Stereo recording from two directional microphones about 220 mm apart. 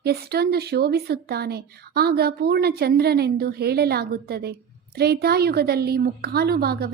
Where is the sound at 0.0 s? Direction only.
45° right (ahead or behind).